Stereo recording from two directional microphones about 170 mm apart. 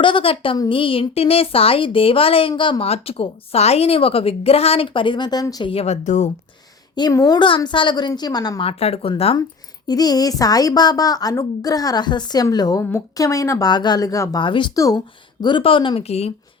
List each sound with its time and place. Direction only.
0.0 s speech: 30° left (ahead or behind)
6.9 s speech: 20° left (ahead or behind)
9.8 s speech: 25° left (ahead or behind)